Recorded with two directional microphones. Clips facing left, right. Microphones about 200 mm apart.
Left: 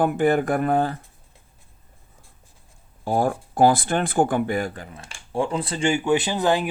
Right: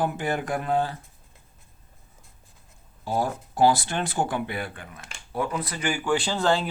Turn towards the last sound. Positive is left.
turn(degrees=15)  # may be behind; listen again after turning